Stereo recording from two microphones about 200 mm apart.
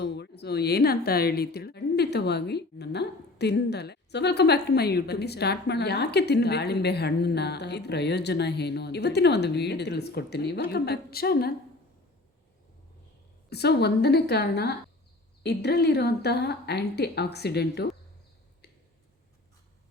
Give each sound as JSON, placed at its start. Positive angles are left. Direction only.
{"t": 0.0, "sound": "a woman's voice", "side_deg": 55}
{"t": 13.5, "sound": "a woman's voice", "side_deg": 55}